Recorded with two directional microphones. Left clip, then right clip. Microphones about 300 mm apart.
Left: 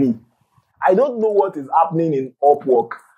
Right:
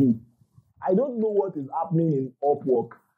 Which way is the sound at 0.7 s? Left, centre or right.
Centre.